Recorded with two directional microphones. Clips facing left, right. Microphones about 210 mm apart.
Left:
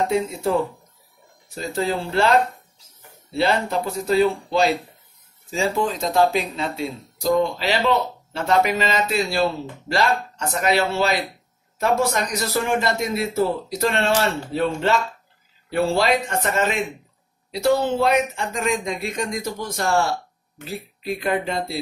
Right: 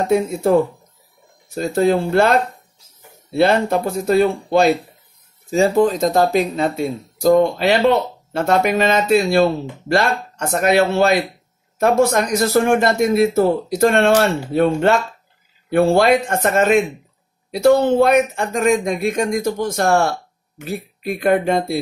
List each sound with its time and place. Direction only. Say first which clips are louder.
0.1 s speech: right 6 dB; 50° right (ahead or behind)
3.3 s speech: right 6 dB; 50° right (ahead or behind)